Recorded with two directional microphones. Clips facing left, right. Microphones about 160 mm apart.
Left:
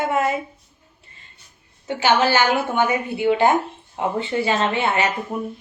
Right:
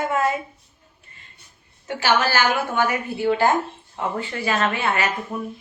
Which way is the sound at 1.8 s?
20° left (ahead or behind).